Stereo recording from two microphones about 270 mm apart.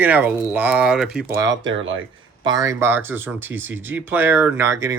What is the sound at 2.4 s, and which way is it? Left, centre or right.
Speech, centre.